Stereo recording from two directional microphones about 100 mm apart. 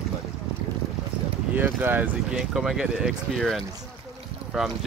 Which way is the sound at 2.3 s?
5° right (ahead or behind).